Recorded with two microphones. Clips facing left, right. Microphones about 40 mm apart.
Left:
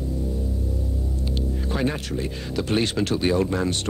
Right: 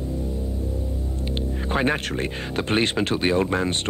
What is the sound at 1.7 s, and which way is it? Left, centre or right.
Speech, right.